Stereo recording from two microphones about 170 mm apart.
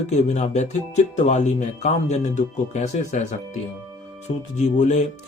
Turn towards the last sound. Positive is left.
turn(degrees=45)  # may be behind; listen again after turning